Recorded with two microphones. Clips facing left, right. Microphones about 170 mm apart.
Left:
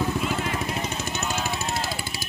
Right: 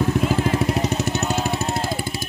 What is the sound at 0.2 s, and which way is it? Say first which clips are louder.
Vehicle: right 7 dB; 35° right (ahead or behind).